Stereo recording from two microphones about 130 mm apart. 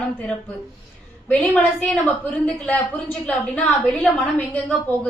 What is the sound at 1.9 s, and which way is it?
A woman's voice, 10° left (ahead or behind).